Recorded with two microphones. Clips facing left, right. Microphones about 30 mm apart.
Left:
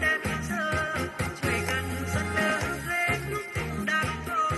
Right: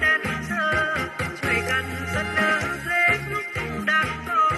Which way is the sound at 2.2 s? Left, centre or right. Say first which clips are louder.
Right 5 dB; right.